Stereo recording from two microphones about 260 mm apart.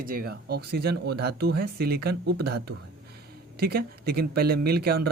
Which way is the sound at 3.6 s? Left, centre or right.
Right.